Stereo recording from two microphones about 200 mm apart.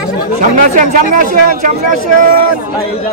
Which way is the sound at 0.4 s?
40° right (ahead or behind).